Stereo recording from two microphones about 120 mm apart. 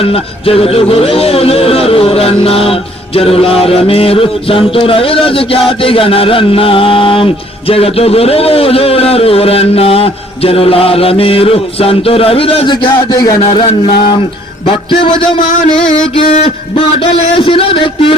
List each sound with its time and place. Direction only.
0.0 s music: 50° left (ahead or behind); by 13.3 s 35° left (ahead or behind)
13.4 s music: 45° left (ahead or behind)
16.1 s a sound: 60° left (ahead or behind)
16.7 s music: 50° left (ahead or behind)